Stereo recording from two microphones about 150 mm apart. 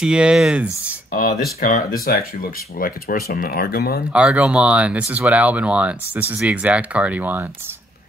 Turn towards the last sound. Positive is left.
turn(degrees=-10)  # may be behind; listen again after turning